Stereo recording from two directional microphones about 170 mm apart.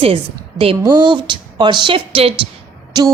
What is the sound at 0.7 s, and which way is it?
Speech, 25° right (ahead or behind).